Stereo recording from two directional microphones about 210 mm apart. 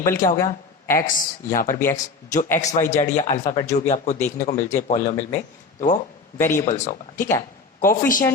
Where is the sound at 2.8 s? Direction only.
10° left (ahead or behind).